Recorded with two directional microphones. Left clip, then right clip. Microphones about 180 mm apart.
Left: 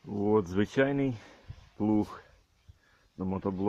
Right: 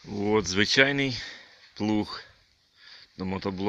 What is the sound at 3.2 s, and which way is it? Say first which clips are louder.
Speech: right 2 dB; 15° right (ahead or behind).